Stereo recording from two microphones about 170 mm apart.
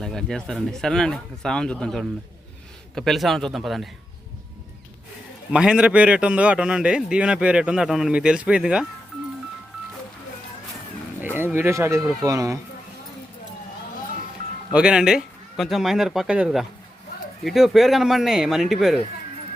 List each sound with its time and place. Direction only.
0.0 s a man's voice: 5° left (ahead or behind)
5.5 s a man's voice: 5° right (ahead or behind)
11.3 s speech: 15° right (ahead or behind)
14.7 s a man's voice: 5° right (ahead or behind)